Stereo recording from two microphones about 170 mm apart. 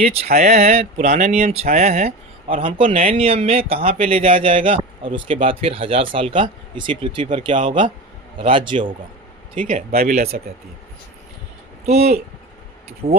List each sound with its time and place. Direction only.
0.3 s a man's voice: 40° right (ahead or behind)
9.6 s speech: 55° right (ahead or behind)
11.9 s a man's voice: 40° right (ahead or behind)